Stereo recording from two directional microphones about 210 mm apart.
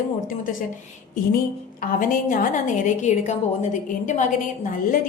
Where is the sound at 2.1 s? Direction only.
40° left (ahead or behind).